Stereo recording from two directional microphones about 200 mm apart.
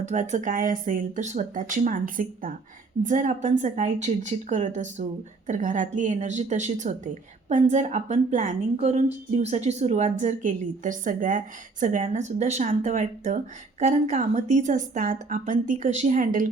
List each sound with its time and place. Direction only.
0.0 s a woman's voice: 35° right (ahead or behind)